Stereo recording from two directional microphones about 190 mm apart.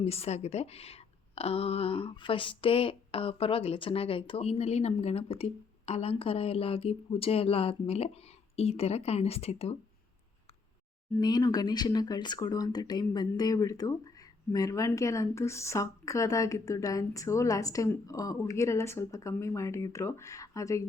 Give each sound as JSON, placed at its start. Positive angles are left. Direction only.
{"t": 0.0, "sound": "speech", "side_deg": 30}
{"t": 11.2, "sound": "speech", "side_deg": 20}